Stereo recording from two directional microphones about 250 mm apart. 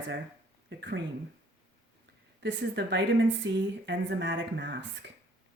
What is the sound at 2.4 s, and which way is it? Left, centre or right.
Speech, right.